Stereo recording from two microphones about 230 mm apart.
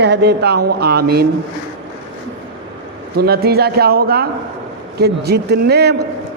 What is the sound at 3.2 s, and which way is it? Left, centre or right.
A man's voice, right.